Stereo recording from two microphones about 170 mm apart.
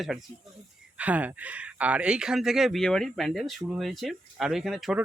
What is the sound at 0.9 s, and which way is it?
Speech, 10° right (ahead or behind).